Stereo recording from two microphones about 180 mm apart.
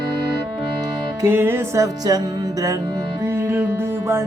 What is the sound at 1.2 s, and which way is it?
Music, 15° right (ahead or behind).